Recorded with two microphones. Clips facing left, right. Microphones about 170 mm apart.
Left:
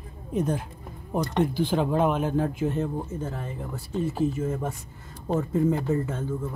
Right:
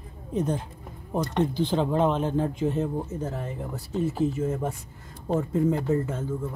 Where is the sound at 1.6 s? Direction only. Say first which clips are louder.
Right 1 dB; 10° left (ahead or behind).